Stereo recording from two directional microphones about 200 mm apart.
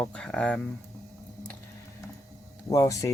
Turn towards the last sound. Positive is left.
turn(degrees=15)  # may be behind; listen again after turning